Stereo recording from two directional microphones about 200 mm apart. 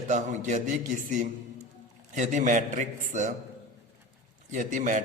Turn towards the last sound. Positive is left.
turn(degrees=-40)  # may be behind; listen again after turning